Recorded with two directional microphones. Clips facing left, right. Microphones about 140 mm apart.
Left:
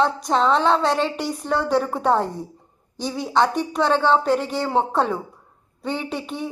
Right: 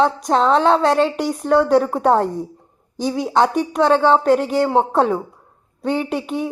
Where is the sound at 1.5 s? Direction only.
45° right (ahead or behind).